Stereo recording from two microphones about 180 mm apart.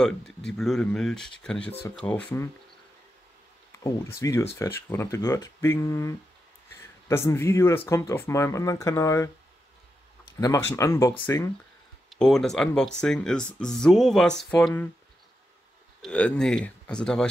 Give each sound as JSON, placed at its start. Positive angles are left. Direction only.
{"t": 0.0, "sound": "speech", "side_deg": 5}
{"t": 3.8, "sound": "speech", "side_deg": 15}
{"t": 10.4, "sound": "speech", "side_deg": 15}
{"t": 12.1, "sound": "speech", "side_deg": 0}
{"t": 16.0, "sound": "speech", "side_deg": 5}